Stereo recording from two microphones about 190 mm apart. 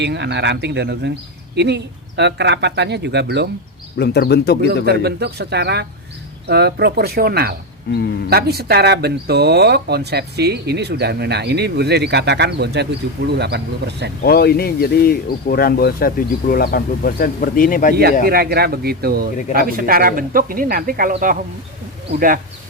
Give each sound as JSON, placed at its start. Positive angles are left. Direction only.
{"t": 0.0, "sound": "speech", "side_deg": -65}
{"t": 3.9, "sound": "speech", "side_deg": 60}
{"t": 4.9, "sound": "speech", "side_deg": -55}
{"t": 14.3, "sound": "speech", "side_deg": 55}
{"t": 18.3, "sound": "a man's voice", "side_deg": -55}